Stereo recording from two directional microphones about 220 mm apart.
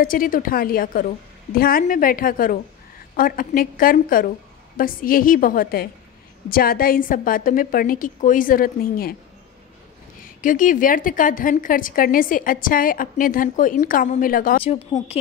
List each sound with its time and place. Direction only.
0.0 s a woman's voice: 40° left (ahead or behind)
10.4 s a woman's voice: 35° left (ahead or behind)
14.6 s speech: 25° left (ahead or behind)